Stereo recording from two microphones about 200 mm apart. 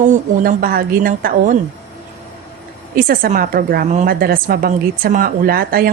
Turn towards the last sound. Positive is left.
turn(degrees=-45)  # may be behind; listen again after turning